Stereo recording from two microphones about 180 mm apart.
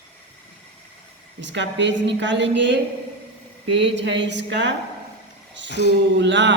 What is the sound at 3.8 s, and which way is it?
Speech, 80° right.